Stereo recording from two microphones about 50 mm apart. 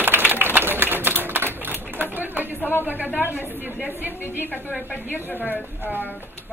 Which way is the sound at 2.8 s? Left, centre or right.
Right.